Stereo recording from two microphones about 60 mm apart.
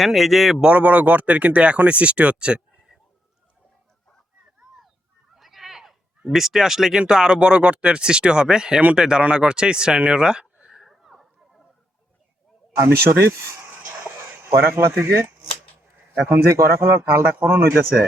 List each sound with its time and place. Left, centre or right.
0.0 s speech: centre
0.6 s speech: right
5.3 s bleat: centre
7.0 s speech: centre
10.8 s a sound: centre
12.8 s speech: right
14.0 s a sound: right
16.5 s speech: right
16.9 s speech: right